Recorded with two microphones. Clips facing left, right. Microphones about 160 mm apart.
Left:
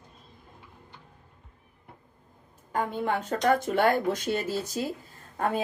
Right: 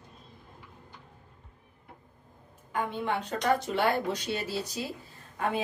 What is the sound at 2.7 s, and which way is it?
A woman's voice, 40° left (ahead or behind).